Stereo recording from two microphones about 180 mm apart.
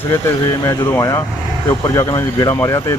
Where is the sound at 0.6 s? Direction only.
15° left (ahead or behind).